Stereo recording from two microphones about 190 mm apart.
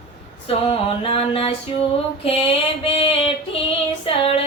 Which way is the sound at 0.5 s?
30° left (ahead or behind).